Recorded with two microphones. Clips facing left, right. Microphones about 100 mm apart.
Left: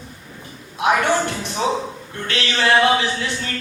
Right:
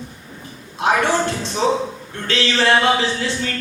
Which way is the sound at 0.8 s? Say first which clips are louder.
Even; 30° right (ahead or behind).